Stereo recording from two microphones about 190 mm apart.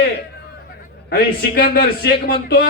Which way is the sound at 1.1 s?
50° left (ahead or behind).